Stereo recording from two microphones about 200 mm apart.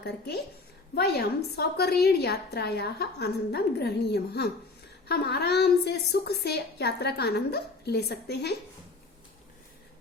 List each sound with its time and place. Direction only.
0.9 s a woman's voice: 55° left (ahead or behind)